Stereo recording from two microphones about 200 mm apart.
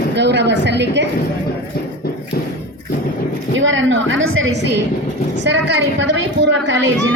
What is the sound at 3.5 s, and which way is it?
A woman's voice, 70° right (ahead or behind).